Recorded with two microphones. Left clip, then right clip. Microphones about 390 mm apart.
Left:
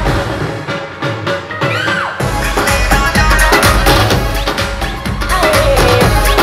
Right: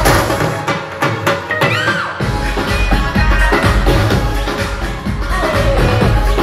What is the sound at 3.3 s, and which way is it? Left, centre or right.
Music, left.